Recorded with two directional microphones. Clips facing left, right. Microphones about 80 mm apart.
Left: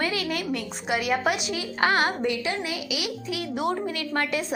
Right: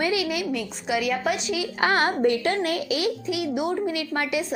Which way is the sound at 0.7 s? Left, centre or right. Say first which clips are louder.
Left 1 dB; left.